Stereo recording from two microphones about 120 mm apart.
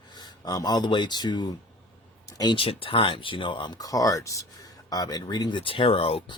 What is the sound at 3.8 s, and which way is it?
Speech, 30° left (ahead or behind).